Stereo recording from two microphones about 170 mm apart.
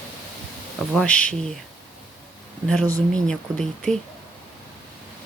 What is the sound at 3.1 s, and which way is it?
Speech, 5° left (ahead or behind).